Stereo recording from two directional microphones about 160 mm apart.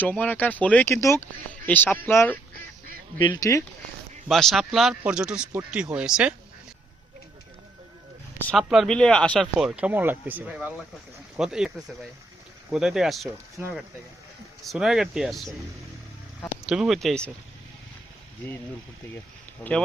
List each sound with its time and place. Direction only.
0.0 s speech: 10° left (ahead or behind)
3.2 s speech: 25° left (ahead or behind)
4.3 s speech: centre (ahead or behind)
8.5 s speech: centre (ahead or behind)
12.7 s speech: centre (ahead or behind)
13.6 s speech: 15° right (ahead or behind)
14.6 s speech: centre (ahead or behind)
16.6 s speech: 5° right (ahead or behind)
19.6 s speech: 15° left (ahead or behind)